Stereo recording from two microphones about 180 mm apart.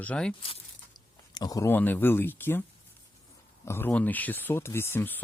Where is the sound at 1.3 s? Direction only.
20° left (ahead or behind).